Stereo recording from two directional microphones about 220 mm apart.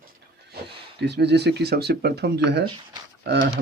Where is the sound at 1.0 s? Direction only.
50° right (ahead or behind).